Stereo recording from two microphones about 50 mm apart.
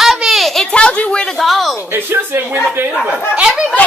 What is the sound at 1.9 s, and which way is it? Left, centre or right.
Speech, right.